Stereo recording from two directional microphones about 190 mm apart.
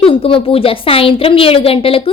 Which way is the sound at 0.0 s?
30° left (ahead or behind).